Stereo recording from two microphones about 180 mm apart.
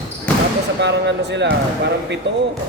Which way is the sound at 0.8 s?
70° right (ahead or behind).